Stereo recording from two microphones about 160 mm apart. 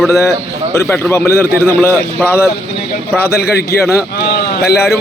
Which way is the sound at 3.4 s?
75° left (ahead or behind).